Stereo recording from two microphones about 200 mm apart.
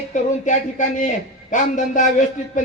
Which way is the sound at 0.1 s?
40° left (ahead or behind).